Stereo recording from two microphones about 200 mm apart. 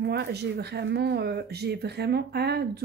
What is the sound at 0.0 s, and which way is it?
Speech, 55° right (ahead or behind).